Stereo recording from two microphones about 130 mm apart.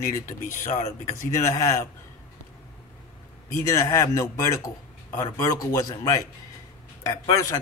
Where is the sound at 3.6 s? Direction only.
25° left (ahead or behind).